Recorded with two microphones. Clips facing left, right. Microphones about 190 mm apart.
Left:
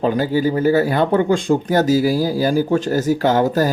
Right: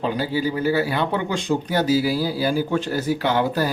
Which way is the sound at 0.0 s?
50° left (ahead or behind).